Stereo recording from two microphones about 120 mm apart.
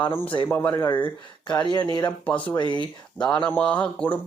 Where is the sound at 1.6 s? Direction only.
35° left (ahead or behind).